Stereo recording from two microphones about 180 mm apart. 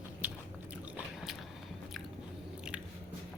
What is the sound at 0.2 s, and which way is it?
Biting, 10° right (ahead or behind).